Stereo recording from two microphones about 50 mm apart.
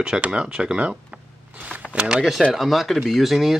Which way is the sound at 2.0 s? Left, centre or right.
Centre.